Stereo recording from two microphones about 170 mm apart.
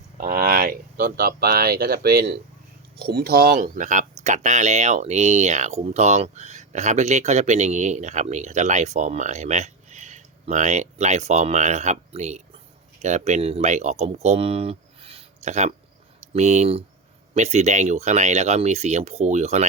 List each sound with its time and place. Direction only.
0.2 s speech: 55° right (ahead or behind)